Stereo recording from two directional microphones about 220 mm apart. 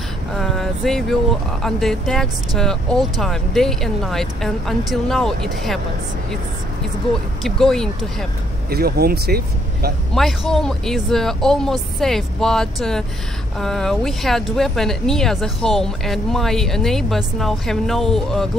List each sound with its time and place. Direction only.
0.4 s vehicle: centre (ahead or behind)
1.6 s speech: centre (ahead or behind)
7.4 s speech: centre (ahead or behind)
8.6 s speech: 45° right (ahead or behind)
10.1 s speech: centre (ahead or behind)